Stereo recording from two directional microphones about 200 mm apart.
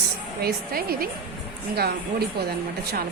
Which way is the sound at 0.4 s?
50° right (ahead or behind).